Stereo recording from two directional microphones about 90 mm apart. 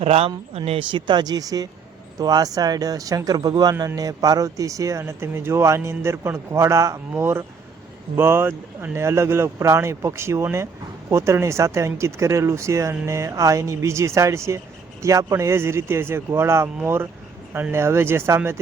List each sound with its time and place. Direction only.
0.1 s a man's voice: 90° right; by 18.6 s 30° right (ahead or behind)